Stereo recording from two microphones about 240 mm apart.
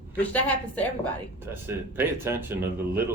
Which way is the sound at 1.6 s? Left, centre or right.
Centre.